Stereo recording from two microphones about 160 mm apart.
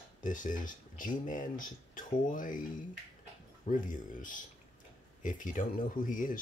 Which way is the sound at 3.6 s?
55° left (ahead or behind).